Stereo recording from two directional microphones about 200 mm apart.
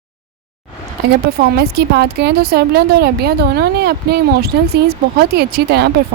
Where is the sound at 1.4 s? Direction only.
50° right (ahead or behind).